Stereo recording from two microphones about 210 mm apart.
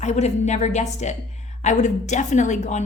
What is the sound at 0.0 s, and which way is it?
A woman's voice, 35° left (ahead or behind).